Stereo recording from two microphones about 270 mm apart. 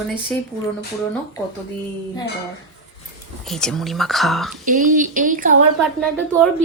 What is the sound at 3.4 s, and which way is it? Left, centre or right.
A woman's voice, centre.